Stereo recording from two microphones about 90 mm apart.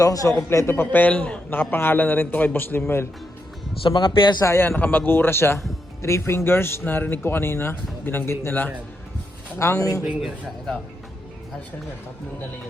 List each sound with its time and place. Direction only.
0.0 s speech: 40° left (ahead or behind)
0.5 s speech: 25° left (ahead or behind)
3.8 s speech: 70° left (ahead or behind)
4.4 s speech: 25° left (ahead or behind)
10.2 s speech: centre (ahead or behind)